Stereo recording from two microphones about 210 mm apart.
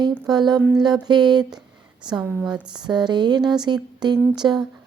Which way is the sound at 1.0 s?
20° right (ahead or behind).